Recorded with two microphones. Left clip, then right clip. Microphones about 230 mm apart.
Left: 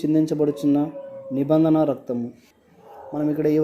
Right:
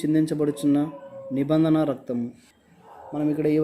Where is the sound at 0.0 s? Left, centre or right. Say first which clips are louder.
Left 3 dB; centre.